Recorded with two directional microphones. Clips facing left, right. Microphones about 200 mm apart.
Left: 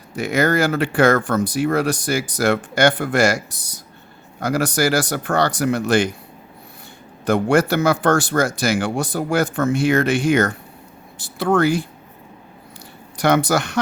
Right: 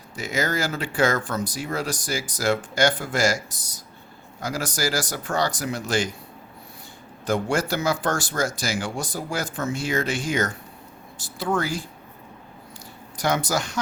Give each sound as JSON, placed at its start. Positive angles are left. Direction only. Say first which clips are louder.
{"t": 0.2, "sound": "speech", "louder": "left 8 dB", "side_deg": 60}
{"t": 7.3, "sound": "speech", "louder": "left 7 dB", "side_deg": 60}
{"t": 13.1, "sound": "speech", "louder": "left 7 dB", "side_deg": 65}